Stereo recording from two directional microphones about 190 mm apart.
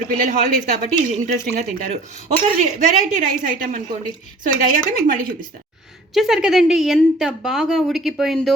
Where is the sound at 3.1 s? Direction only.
40° right (ahead or behind).